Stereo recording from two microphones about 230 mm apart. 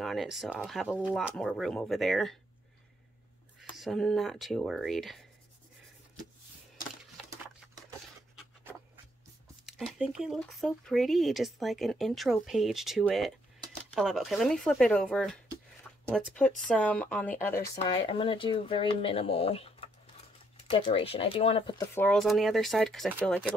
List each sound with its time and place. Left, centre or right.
0.0 s speech: centre
3.7 s speech: centre
9.7 s speech: centre
17.8 s speech: left; by 23.5 s centre